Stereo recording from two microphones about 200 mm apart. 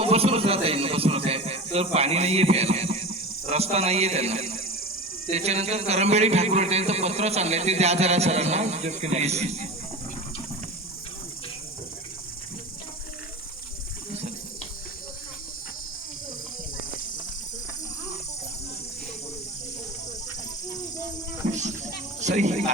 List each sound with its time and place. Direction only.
0.0 s a man's voice: 30° right (ahead or behind)
14.1 s water: 30° right (ahead or behind)
21.4 s children playing: 40° right (ahead or behind)
22.2 s a sound: 35° right (ahead or behind)